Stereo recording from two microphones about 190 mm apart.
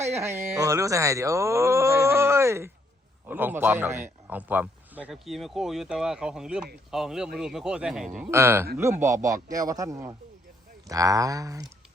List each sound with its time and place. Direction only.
0.2 s speech: 15° right (ahead or behind)
8.3 s speech: 15° right (ahead or behind)